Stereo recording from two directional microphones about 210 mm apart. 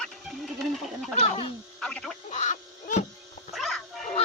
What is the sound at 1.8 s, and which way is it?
Speech, 5° left (ahead or behind).